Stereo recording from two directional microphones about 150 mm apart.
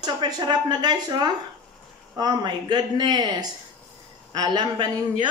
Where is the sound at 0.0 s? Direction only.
30° right (ahead or behind).